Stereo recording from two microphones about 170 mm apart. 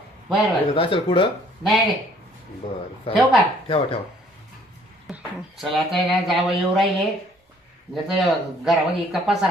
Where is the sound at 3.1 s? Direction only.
35° left (ahead or behind).